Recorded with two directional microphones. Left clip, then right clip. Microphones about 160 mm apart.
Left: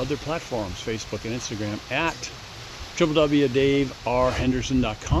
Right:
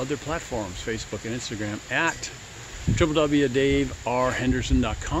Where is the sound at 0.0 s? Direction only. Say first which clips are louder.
Left 1 dB; 10° left (ahead or behind).